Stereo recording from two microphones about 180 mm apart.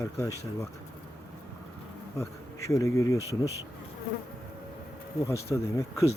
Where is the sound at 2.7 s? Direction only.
15° left (ahead or behind).